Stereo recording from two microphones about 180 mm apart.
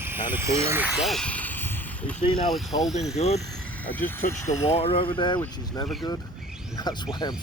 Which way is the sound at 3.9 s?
10° left (ahead or behind).